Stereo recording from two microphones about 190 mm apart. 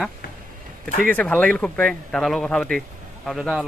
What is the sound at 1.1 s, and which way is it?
Speech, 10° left (ahead or behind).